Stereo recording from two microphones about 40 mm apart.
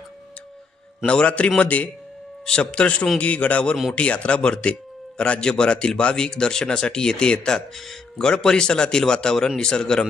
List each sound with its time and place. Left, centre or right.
1.0 s a man's voice: left
2.4 s a man's voice: left